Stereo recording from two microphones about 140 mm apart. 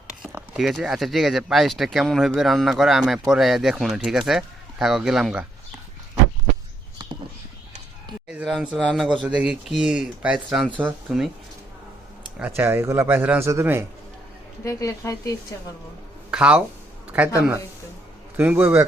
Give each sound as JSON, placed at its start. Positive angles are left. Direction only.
{"t": 0.5, "sound": "speech", "side_deg": 0}
{"t": 7.0, "sound": "a sound", "side_deg": -30}
{"t": 8.3, "sound": "a man's voice", "side_deg": -5}
{"t": 12.4, "sound": "a man's voice", "side_deg": -15}
{"t": 14.6, "sound": "speech", "side_deg": 20}
{"t": 16.3, "sound": "a man's voice", "side_deg": -5}
{"t": 18.3, "sound": "a man's voice", "side_deg": -10}